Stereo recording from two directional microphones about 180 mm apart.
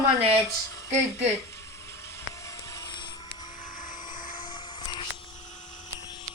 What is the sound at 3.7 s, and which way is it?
Vehicle, 50° left (ahead or behind).